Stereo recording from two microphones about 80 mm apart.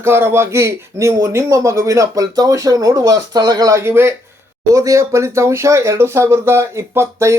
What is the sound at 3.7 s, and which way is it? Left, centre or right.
Speech, right.